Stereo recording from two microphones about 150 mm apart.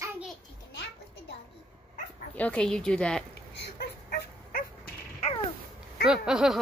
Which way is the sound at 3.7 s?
90° left.